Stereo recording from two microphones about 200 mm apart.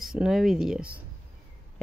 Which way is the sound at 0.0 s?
Centre (ahead or behind).